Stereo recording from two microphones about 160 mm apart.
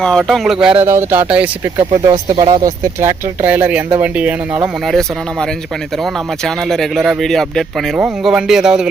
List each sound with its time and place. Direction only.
0.0 s speech: centre (ahead or behind)
0.9 s speech: 15° right (ahead or behind)
2.4 s speech: 25° right (ahead or behind)
3.4 s speech: 10° right (ahead or behind)
6.4 s speech: centre (ahead or behind)